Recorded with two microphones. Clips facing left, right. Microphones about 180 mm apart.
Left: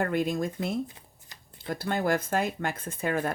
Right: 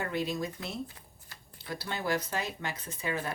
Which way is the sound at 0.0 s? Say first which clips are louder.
Left 6 dB; 50° left (ahead or behind).